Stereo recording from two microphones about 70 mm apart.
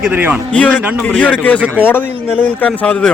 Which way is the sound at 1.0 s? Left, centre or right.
Left.